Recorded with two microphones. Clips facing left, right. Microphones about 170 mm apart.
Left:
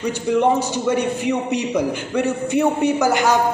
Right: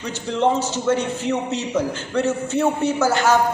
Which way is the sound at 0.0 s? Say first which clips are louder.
Left 3 dB; 10° left (ahead or behind).